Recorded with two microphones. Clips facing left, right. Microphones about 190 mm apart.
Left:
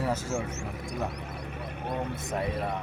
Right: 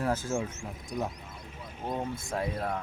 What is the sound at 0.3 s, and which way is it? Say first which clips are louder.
Speech: even; 70° left (ahead or behind).